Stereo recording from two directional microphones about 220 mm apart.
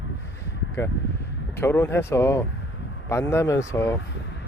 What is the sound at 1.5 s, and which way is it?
Speech, 10° left (ahead or behind).